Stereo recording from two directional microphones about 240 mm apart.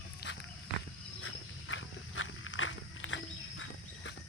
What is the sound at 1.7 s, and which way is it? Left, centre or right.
Walk, left.